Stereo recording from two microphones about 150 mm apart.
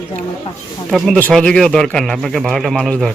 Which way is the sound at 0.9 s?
Centre (ahead or behind).